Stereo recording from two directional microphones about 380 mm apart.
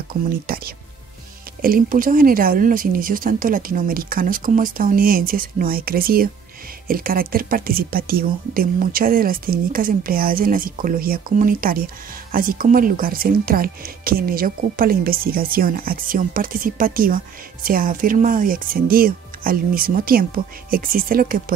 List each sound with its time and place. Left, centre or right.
0.1 s speech: right